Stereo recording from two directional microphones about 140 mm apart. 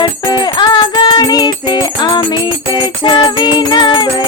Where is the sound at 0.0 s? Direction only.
30° left (ahead or behind).